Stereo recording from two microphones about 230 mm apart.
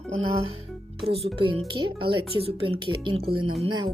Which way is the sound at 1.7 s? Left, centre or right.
Right.